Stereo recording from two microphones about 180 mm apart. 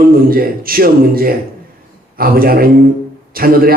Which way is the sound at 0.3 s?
55° right (ahead or behind).